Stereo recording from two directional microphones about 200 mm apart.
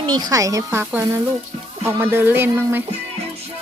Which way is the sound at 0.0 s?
20° right (ahead or behind).